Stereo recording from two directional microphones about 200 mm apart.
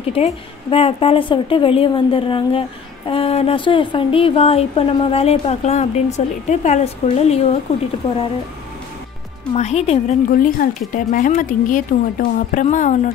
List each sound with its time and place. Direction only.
0.1 s a woman's voice: 30° left (ahead or behind)
9.5 s a woman's voice: 35° left (ahead or behind)